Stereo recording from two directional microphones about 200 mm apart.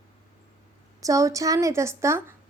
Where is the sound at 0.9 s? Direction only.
15° right (ahead or behind).